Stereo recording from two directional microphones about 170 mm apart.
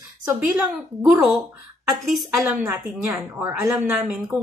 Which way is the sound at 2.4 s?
10° right (ahead or behind).